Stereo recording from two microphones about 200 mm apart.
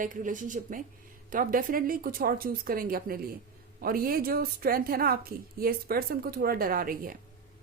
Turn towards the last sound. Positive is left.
turn(degrees=-45)  # may be behind; listen again after turning